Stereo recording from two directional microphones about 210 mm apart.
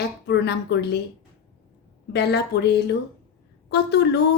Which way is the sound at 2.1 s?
50° left (ahead or behind).